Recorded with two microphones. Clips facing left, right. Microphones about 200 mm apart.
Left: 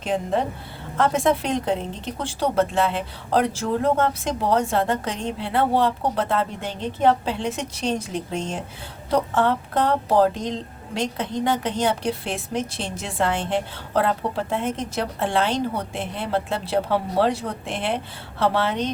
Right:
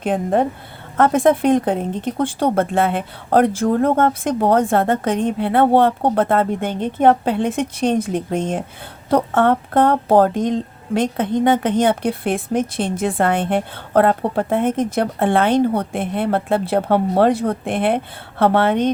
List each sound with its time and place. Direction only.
0.0 s a woman's voice: 55° right (ahead or behind)